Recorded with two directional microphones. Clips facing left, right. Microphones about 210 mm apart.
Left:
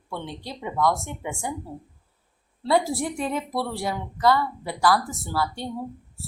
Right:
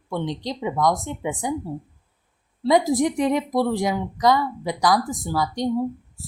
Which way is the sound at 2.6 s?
15° right (ahead or behind).